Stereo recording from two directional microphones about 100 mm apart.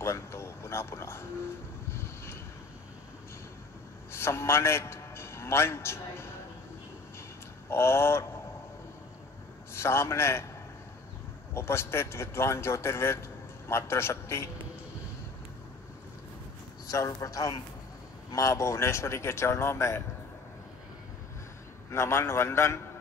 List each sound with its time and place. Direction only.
0.0 s a sound: 25° left (ahead or behind)
1.9 s boat: 25° left (ahead or behind)
4.1 s a man's voice: 25° left (ahead or behind)
7.7 s a man's voice: 25° left (ahead or behind)
9.8 s a man's voice: 25° left (ahead or behind)
11.5 s a man's voice: 25° left (ahead or behind)
16.8 s a man's voice: 35° left (ahead or behind)
21.9 s a man's voice: 25° left (ahead or behind)